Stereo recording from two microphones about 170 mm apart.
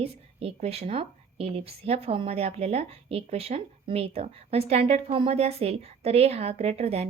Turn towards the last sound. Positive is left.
turn(degrees=-35)  # may be behind; listen again after turning